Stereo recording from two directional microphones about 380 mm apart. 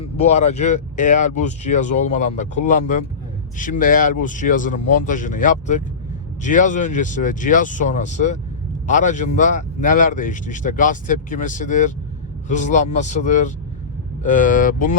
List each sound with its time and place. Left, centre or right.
0.0 s speech: centre